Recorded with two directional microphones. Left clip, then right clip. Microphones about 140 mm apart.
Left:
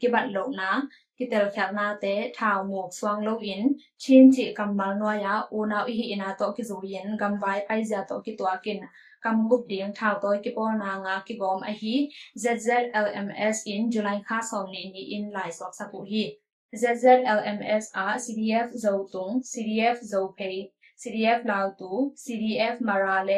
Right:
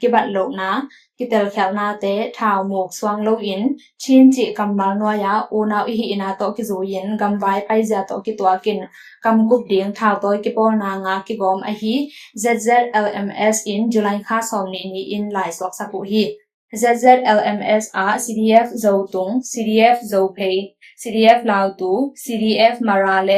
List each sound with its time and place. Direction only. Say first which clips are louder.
0.0 s speech: right 9 dB; 35° right (ahead or behind)